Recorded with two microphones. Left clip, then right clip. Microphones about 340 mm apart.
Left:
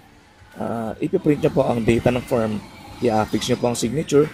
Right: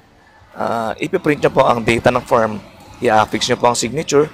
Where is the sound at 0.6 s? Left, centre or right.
Right.